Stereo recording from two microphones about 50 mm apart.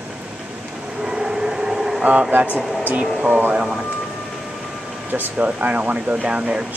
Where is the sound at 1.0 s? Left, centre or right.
Centre.